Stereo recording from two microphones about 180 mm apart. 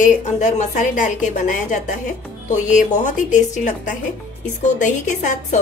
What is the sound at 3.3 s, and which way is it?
A woman's voice, 45° left (ahead or behind).